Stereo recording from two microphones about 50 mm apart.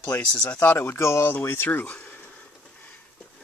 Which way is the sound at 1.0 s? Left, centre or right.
Left.